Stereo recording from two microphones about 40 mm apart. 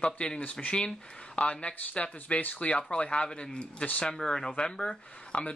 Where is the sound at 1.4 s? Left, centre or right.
Left.